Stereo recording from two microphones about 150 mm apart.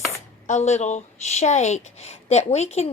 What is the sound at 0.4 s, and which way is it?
A woman's voice, 50° left (ahead or behind).